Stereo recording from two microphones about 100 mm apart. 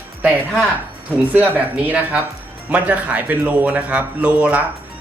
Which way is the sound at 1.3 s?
15° right (ahead or behind).